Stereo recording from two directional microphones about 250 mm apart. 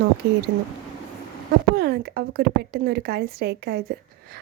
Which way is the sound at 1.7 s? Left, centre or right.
Right.